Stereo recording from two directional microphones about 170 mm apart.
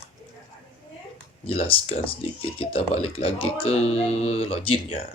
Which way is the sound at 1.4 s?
35° left (ahead or behind).